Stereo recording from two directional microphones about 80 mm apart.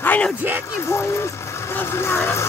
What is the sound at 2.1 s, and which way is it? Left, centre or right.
Speech, left.